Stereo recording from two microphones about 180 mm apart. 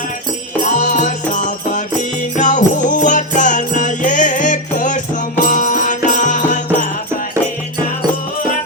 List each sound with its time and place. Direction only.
0.6 s music: 45° left (ahead or behind)